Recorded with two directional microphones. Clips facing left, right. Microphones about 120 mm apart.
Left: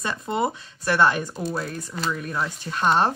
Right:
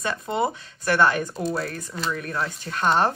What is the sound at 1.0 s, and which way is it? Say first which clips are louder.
Speech: even; 20° left (ahead or behind).